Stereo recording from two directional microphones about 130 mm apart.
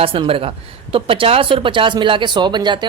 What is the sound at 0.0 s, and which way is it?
Speech, 45° right (ahead or behind).